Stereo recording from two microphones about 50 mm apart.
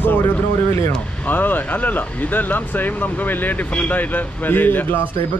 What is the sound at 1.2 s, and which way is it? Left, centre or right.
Speech, left.